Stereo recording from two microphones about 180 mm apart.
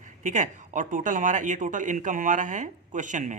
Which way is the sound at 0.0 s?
45° right (ahead or behind).